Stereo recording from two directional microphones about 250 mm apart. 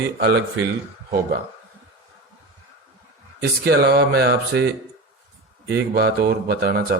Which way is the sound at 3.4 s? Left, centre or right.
Right.